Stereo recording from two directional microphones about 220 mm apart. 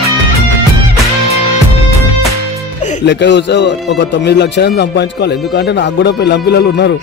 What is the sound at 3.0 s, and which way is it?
Speech, 50° left (ahead or behind).